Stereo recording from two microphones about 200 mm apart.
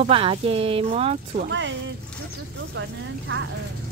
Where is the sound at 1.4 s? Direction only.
65° right (ahead or behind).